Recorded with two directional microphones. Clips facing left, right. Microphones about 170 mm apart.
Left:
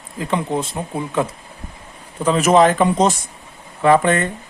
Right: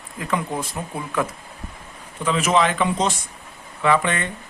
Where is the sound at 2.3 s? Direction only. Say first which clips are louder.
Left 6 dB; 45° left (ahead or behind).